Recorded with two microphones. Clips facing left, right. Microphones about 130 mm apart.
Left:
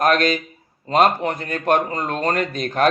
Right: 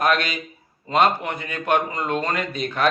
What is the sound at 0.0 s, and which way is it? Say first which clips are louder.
Speech: left 4 dB; 40° left (ahead or behind).